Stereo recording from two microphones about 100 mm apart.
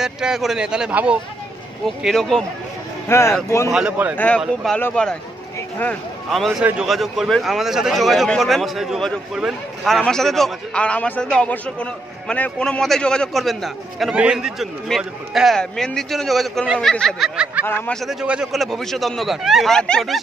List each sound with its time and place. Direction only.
0.0 s a man's voice: 5° right (ahead or behind)
1.9 s a man's voice: 5° left (ahead or behind)
3.1 s speech: 25° left (ahead or behind)
3.7 s a man's voice: 15° right (ahead or behind)
4.7 s a man's voice: 15° left (ahead or behind)
6.9 s a man's voice: centre (ahead or behind)
17.6 s a man's voice: 15° right (ahead or behind)
18.5 s a man's voice: centre (ahead or behind)